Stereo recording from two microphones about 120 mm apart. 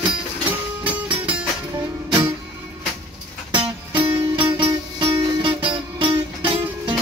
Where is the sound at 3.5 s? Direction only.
40° right (ahead or behind).